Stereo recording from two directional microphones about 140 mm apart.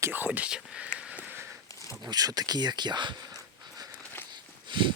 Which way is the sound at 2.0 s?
30° right (ahead or behind).